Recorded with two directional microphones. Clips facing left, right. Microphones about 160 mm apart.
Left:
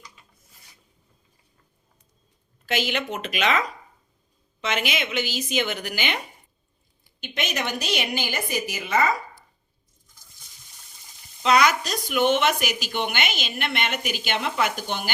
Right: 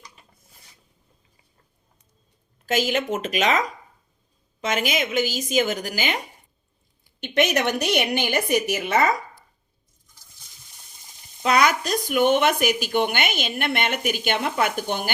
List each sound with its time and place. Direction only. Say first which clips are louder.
2.6 s speech: right 4 dB; 40° right (ahead or behind)
7.2 s a woman's voice: right 8 dB; 65° right (ahead or behind)
11.4 s speech: even; 50° right (ahead or behind)